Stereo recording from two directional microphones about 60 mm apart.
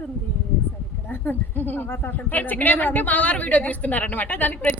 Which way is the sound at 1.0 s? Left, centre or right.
Left.